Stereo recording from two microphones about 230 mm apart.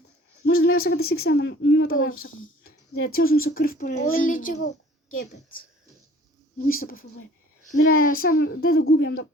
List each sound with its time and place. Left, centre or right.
0.4 s a sound: left
1.0 s speech: left
2.6 s a sound: left
3.5 s speech: left
6.7 s speech: left
8.7 s speech: left